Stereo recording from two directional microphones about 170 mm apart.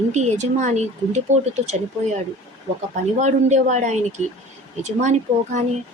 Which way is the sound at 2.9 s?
45° right (ahead or behind).